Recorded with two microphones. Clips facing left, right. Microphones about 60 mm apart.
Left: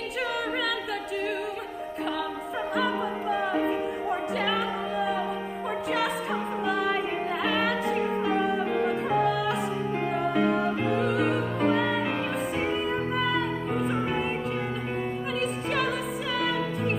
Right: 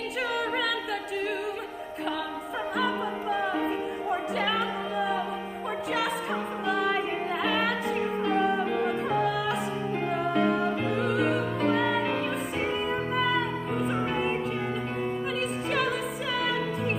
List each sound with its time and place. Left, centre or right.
2.8 s music: centre
6.6 s music: centre
15.4 s music: centre